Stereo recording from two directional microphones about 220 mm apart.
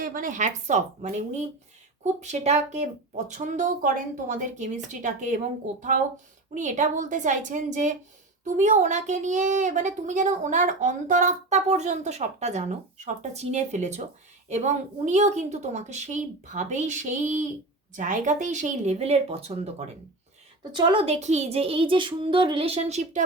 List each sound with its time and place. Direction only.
0.0 s speech: 40° right (ahead or behind)
2.2 s speech: 30° right (ahead or behind)
6.5 s speech: 35° right (ahead or behind)
20.7 s speech: 20° right (ahead or behind)